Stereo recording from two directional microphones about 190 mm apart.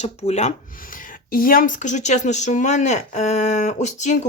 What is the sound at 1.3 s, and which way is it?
Speech, 50° left (ahead or behind).